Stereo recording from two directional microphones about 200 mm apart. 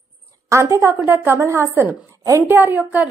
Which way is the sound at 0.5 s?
15° right (ahead or behind).